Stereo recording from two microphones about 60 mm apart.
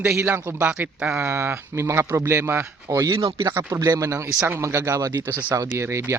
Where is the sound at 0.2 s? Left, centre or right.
Right.